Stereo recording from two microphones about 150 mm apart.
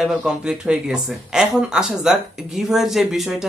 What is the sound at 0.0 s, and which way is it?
Speech, 5° right (ahead or behind).